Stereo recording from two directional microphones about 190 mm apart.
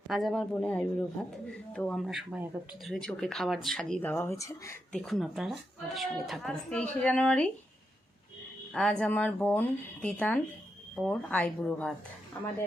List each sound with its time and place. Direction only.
0.1 s speech: centre (ahead or behind)
4.9 s speech: 5° left (ahead or behind)
8.7 s speech: 5° left (ahead or behind)